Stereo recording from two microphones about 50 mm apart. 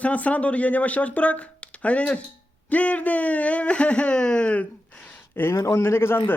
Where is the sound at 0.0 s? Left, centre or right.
Left.